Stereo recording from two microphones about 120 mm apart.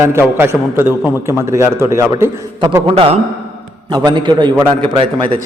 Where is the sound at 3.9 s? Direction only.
40° right (ahead or behind).